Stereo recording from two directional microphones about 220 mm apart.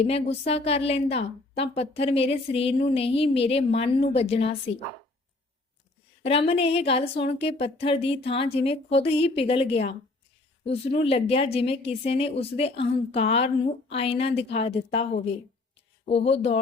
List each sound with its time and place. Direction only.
0.0 s speech: 25° left (ahead or behind)
6.2 s speech: 25° left (ahead or behind)